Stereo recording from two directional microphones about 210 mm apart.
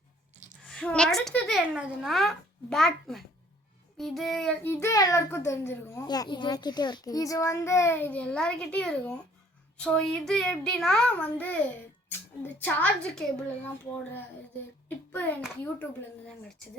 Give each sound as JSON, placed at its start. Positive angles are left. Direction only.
{"t": 0.7, "sound": "a child's voice", "side_deg": 5}
{"t": 12.5, "sound": "a child's voice", "side_deg": 5}
{"t": 14.8, "sound": "a child's voice", "side_deg": 10}